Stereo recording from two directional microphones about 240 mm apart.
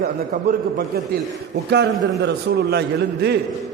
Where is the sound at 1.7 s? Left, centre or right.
Right.